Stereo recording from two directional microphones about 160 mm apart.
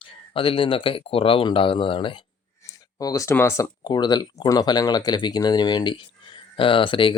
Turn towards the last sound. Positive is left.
turn(degrees=30)  # may be behind; listen again after turning